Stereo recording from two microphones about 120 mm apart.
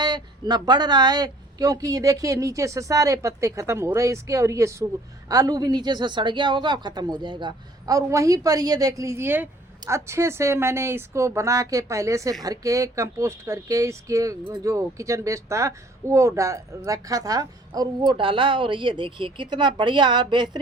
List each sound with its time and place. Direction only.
0.0 s a woman's voice: 35° right (ahead or behind)